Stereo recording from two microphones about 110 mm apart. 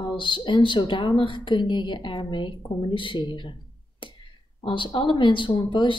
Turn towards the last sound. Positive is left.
turn(degrees=50)  # may be behind; listen again after turning